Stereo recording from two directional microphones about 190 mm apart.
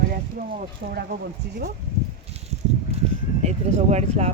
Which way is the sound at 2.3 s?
35° right (ahead or behind).